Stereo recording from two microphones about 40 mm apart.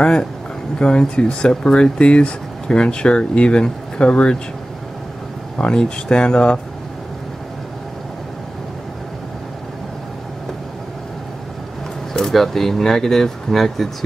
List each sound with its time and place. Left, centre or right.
0.7 s speech: left
5.6 s speech: left
12.1 s speech: centre